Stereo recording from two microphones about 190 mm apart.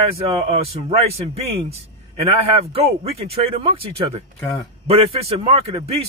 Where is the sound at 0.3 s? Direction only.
30° right (ahead or behind).